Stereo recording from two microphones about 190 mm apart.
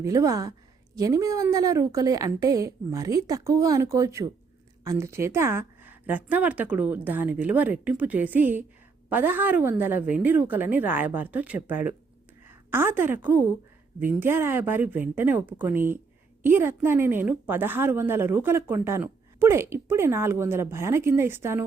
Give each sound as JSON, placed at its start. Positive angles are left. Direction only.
{"t": 0.0, "sound": "a woman's voice", "side_deg": -15}